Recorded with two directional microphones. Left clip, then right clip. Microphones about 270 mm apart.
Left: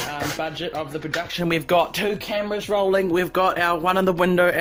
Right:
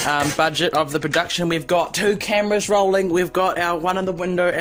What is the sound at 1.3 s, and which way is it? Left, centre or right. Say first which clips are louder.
Speech: right 1 dB; centre.